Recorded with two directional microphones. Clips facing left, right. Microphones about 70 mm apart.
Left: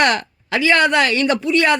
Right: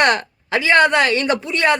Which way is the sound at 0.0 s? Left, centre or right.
Right.